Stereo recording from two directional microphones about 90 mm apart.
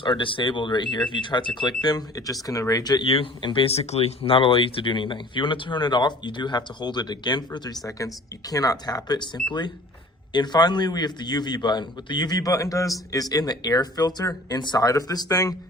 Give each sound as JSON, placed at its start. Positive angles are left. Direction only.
{"t": 0.0, "sound": "speech", "side_deg": 65}
{"t": 3.0, "sound": "a man's voice", "side_deg": 80}